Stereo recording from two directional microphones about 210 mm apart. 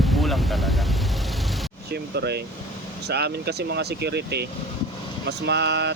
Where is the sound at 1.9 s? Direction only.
50° right (ahead or behind).